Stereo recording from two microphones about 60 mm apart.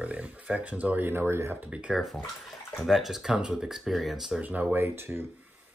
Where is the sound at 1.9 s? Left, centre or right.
Centre.